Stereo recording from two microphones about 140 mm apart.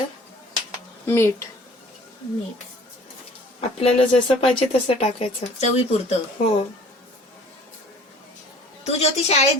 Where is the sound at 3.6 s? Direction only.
45° left (ahead or behind).